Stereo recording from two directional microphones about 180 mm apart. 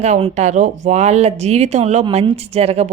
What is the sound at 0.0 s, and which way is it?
Speech, 40° right (ahead or behind).